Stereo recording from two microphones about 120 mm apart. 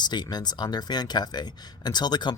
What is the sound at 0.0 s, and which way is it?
Speech, 35° left (ahead or behind).